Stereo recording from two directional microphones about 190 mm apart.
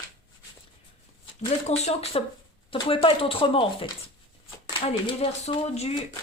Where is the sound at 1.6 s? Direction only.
35° left (ahead or behind).